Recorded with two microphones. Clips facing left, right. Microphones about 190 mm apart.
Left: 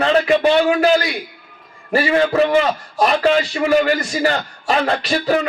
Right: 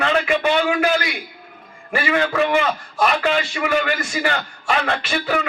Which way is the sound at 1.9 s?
35° left (ahead or behind).